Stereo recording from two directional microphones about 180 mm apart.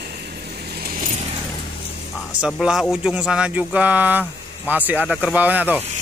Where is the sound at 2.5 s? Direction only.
Centre (ahead or behind).